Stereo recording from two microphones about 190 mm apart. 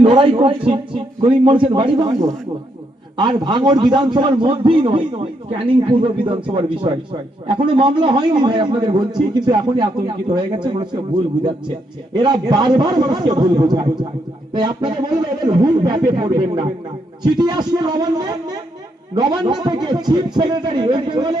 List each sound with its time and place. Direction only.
0.0 s a man's voice: 25° right (ahead or behind)
3.2 s a man's voice: 25° right (ahead or behind)